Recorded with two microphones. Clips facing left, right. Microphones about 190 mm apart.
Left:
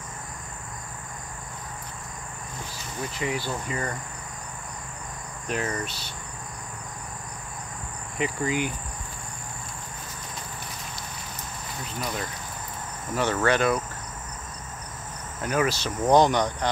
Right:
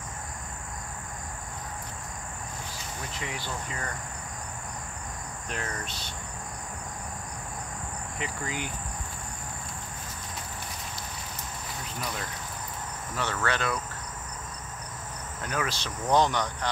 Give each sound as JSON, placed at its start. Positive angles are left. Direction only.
{"t": 3.2, "sound": "speech", "side_deg": 10}
{"t": 5.5, "sound": "speech", "side_deg": 5}
{"t": 8.2, "sound": "speech", "side_deg": 15}
{"t": 13.1, "sound": "speech", "side_deg": 15}
{"t": 15.4, "sound": "speech", "side_deg": 10}